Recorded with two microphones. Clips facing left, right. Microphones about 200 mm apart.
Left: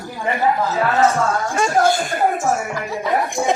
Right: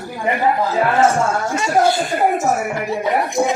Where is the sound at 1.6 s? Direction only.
45° left (ahead or behind).